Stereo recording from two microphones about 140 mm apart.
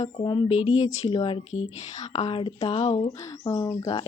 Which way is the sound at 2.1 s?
45° left (ahead or behind).